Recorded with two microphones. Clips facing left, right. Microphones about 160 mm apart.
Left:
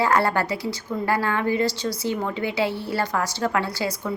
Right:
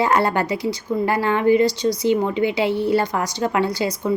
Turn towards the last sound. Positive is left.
turn(degrees=-20)  # may be behind; listen again after turning